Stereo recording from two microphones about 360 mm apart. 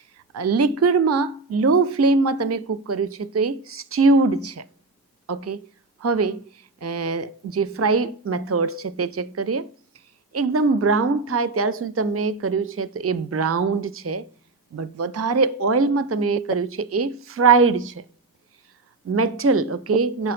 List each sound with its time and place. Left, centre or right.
0.3 s a woman's voice: right
19.1 s a woman's voice: right